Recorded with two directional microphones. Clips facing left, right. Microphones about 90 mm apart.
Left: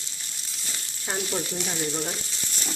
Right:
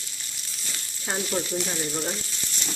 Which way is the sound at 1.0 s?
10° right (ahead or behind).